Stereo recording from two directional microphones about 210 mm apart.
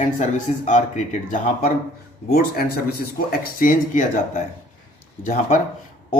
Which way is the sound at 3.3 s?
40° left (ahead or behind).